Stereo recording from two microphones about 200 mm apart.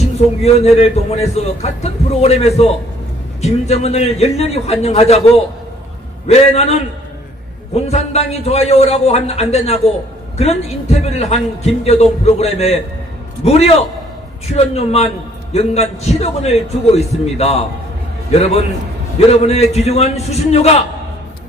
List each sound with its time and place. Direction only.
0.0 s a man's voice: 35° left (ahead or behind)
6.2 s a man's voice: 30° left (ahead or behind)